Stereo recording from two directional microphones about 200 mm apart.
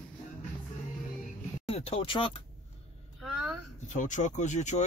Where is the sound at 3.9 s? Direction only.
40° left (ahead or behind).